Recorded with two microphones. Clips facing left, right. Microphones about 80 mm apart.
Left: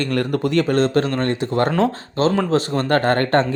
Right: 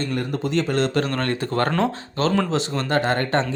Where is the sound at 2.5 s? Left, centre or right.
Left.